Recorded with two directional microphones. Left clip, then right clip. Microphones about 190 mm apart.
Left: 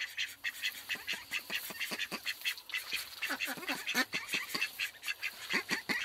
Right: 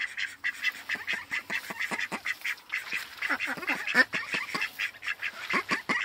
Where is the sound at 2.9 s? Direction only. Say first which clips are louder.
Right 8 dB; 45° left (ahead or behind).